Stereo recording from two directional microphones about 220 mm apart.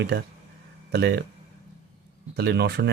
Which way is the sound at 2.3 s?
45° right (ahead or behind).